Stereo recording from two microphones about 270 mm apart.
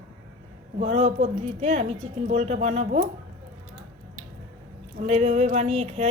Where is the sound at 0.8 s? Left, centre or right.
Right.